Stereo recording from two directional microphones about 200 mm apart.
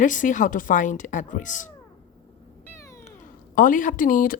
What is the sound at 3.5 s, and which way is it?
Speech, 45° left (ahead or behind).